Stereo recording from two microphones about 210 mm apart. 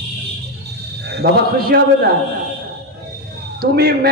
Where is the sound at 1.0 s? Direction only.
50° right (ahead or behind).